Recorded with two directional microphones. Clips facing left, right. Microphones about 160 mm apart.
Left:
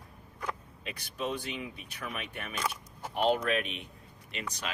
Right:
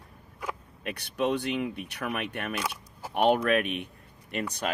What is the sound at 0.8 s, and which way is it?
Speech, 65° right (ahead or behind).